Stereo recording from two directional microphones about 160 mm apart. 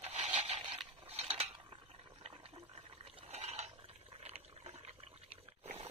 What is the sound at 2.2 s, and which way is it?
Water, 35° right (ahead or behind).